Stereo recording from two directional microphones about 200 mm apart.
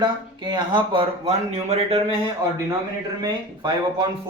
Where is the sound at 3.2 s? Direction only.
20° right (ahead or behind).